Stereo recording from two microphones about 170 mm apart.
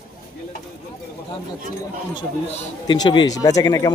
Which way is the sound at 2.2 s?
25° left (ahead or behind).